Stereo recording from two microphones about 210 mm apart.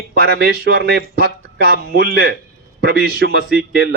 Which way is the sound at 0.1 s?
50° right (ahead or behind).